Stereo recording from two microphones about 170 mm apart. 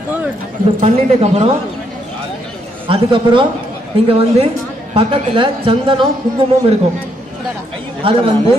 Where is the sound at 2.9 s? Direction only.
30° right (ahead or behind).